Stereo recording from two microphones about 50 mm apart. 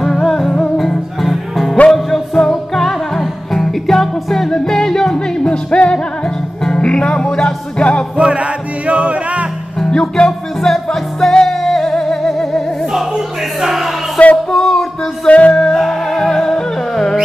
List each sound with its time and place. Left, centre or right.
0.0 s music: centre
8.2 s music: right
9.8 s music: centre
12.9 s music: centre
14.2 s music: left
14.5 s music: centre
15.2 s music: left
15.6 s music: centre